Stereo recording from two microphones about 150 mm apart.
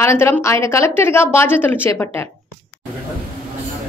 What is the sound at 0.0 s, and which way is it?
A woman's voice, 15° left (ahead or behind).